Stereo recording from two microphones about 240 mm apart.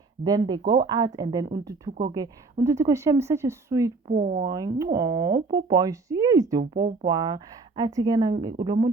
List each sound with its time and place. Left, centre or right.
0.3 s speech: centre
4.1 s speech: right
4.4 s speech: centre